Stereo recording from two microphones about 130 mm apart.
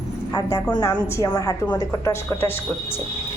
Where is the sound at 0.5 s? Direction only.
30° left (ahead or behind).